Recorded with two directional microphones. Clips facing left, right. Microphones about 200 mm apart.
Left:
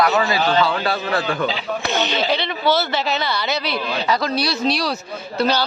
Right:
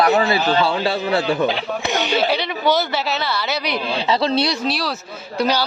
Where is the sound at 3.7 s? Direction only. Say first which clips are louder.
Right 3 dB; 30° right (ahead or behind).